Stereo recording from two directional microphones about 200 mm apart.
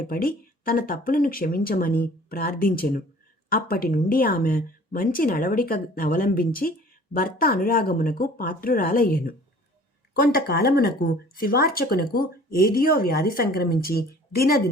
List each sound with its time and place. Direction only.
0.0 s a woman's voice: 45° left (ahead or behind)